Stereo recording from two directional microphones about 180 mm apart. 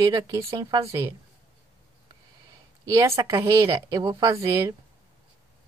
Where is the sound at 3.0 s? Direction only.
20° right (ahead or behind).